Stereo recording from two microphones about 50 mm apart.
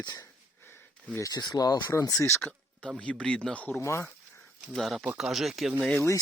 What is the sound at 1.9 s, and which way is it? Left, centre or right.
Speech, left.